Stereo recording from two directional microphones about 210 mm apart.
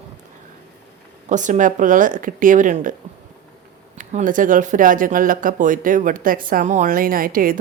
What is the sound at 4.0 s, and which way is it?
Speech, 35° right (ahead or behind).